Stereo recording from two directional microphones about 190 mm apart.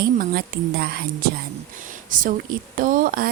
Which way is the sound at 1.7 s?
45° right (ahead or behind).